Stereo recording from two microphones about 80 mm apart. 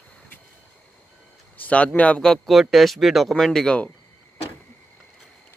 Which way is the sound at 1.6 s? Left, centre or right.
Centre.